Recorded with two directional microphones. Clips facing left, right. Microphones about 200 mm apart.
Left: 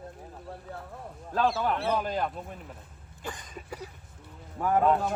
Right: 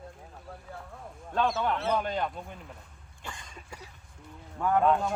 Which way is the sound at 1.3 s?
Centre (ahead or behind).